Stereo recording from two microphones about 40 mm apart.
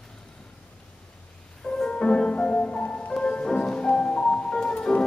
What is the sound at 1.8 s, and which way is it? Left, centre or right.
Music, left.